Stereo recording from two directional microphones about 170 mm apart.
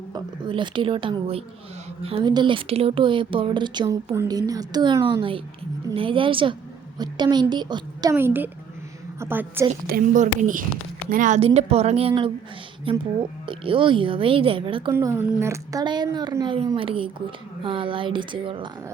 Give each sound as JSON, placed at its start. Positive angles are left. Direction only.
{"t": 0.1, "sound": "speech", "side_deg": -30}
{"t": 8.1, "sound": "a woman's voice", "side_deg": -10}
{"t": 9.8, "sound": "speech", "side_deg": -55}
{"t": 14.9, "sound": "speech", "side_deg": -15}